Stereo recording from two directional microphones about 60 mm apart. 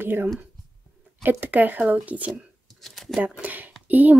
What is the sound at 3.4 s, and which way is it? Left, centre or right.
Speech, right.